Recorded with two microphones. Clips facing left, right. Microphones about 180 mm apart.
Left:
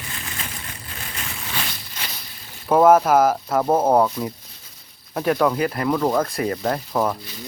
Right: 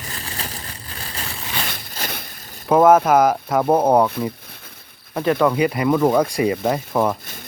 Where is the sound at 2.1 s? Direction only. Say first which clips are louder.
Right 7 dB; 50° right (ahead or behind).